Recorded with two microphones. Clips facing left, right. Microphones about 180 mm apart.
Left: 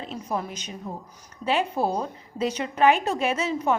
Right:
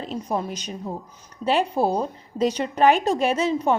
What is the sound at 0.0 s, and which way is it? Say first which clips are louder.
A woman's voice: right 3 dB; 35° right (ahead or behind).